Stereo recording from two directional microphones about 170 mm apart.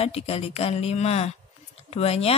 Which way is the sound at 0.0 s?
35° left (ahead or behind).